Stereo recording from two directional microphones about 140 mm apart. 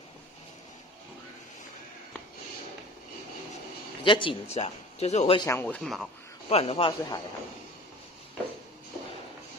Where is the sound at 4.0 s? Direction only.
35° left (ahead or behind).